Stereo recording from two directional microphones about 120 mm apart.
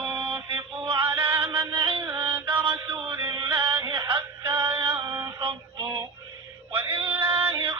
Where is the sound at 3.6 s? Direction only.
40° right (ahead or behind).